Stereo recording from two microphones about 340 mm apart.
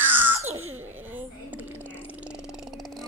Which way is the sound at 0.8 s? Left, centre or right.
Centre.